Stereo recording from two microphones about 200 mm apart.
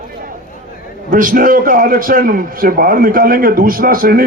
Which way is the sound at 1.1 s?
45° right (ahead or behind).